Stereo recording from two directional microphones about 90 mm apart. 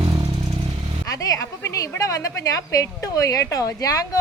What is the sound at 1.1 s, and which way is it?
A woman's voice, 40° left (ahead or behind).